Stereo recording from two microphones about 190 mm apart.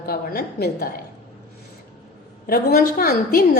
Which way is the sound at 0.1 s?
50° left (ahead or behind).